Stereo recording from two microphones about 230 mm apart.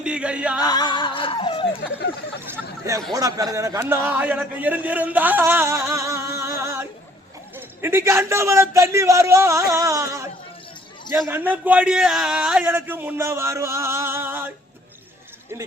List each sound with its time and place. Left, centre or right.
0.0 s music: centre
0.6 s music: centre
2.5 s a sound: centre
3.1 s a man's voice: centre
11.3 s a man's voice: centre